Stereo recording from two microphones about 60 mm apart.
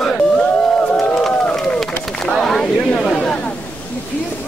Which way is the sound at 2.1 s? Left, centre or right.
Centre.